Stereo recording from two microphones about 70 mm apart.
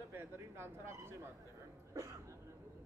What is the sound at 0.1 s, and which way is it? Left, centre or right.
Speech, right.